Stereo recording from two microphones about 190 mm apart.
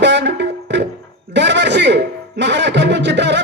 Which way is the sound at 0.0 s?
65° right (ahead or behind).